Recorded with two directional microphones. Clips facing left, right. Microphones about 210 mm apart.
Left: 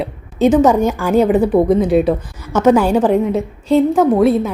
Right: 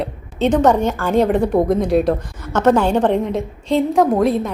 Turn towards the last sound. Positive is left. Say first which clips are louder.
# left 3 dB
turn(degrees=5)  # may be behind; listen again after turning